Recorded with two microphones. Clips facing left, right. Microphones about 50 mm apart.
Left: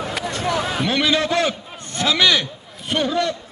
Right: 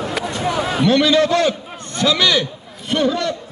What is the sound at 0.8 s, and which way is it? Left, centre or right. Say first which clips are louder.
A man's voice: right 8 dB; centre.